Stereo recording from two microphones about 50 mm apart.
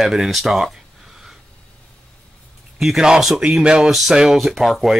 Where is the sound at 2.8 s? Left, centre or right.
Centre.